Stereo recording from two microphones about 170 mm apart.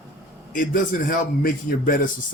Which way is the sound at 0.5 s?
55° left (ahead or behind).